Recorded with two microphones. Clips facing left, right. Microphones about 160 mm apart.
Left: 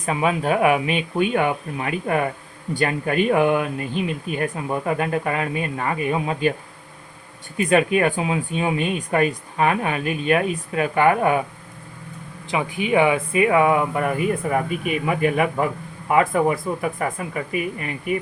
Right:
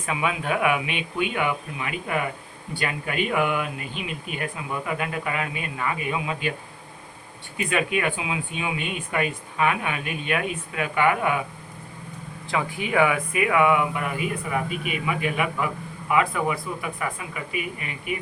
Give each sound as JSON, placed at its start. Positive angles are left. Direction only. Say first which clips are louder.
{"t": 0.0, "sound": "speech", "louder": "left 5 dB", "side_deg": 40}
{"t": 7.5, "sound": "speech", "louder": "left 7 dB", "side_deg": 40}
{"t": 12.5, "sound": "speech", "louder": "left 4 dB", "side_deg": 20}